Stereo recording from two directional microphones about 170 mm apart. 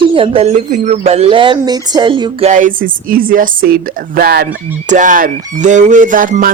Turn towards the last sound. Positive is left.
turn(degrees=-55)  # may be behind; listen again after turning